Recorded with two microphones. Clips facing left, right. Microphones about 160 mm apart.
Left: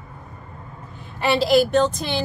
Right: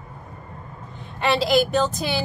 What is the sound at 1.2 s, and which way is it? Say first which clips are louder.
A woman's voice: left 2 dB; centre (ahead or behind).